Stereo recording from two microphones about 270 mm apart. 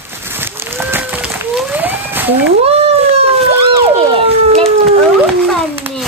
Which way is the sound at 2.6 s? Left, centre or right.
Right.